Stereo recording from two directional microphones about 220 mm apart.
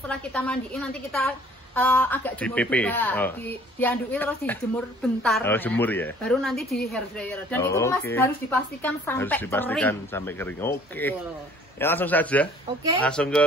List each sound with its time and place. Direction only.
0.1 s a woman's voice: 5° left (ahead or behind)